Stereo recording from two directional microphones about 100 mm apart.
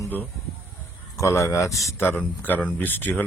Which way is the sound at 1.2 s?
30° left (ahead or behind).